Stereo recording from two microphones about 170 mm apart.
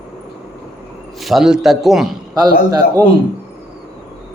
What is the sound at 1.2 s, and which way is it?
Speech, centre (ahead or behind).